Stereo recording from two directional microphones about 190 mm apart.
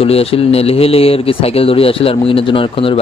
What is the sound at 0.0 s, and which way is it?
A man's voice, 30° left (ahead or behind).